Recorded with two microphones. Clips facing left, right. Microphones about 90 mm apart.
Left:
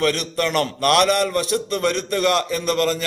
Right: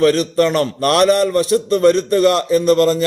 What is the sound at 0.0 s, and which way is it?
A man's voice, 35° right (ahead or behind).